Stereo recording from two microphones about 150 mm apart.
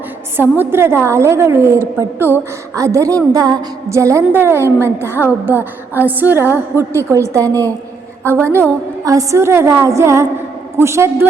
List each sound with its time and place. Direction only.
0.5 s a woman's voice: 15° right (ahead or behind)
8.2 s a woman's voice: 10° left (ahead or behind)
9.0 s a woman's voice: 20° right (ahead or behind)